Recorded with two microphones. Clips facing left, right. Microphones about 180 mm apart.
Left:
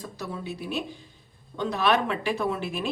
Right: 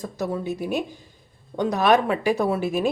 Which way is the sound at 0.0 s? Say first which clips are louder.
Right 8 dB; 45° right (ahead or behind).